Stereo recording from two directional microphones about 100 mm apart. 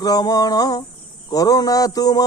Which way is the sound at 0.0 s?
40° left (ahead or behind).